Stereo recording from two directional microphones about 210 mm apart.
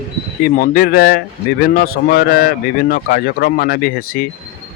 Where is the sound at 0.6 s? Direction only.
45° left (ahead or behind).